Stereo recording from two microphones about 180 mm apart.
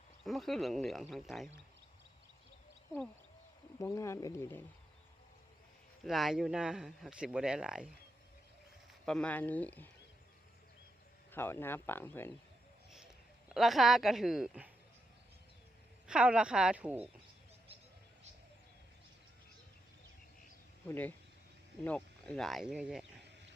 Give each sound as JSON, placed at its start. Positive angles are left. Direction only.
{"t": 0.3, "sound": "speech", "side_deg": 0}
{"t": 3.8, "sound": "speech", "side_deg": 15}
{"t": 6.1, "sound": "speech", "side_deg": 0}
{"t": 9.0, "sound": "speech", "side_deg": 5}
{"t": 11.3, "sound": "speech", "side_deg": 10}
{"t": 13.5, "sound": "speech", "side_deg": 0}
{"t": 16.0, "sound": "speech", "side_deg": -5}
{"t": 20.9, "sound": "speech", "side_deg": 10}